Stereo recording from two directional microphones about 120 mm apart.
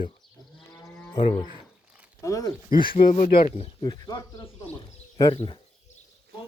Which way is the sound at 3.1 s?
60° left (ahead or behind).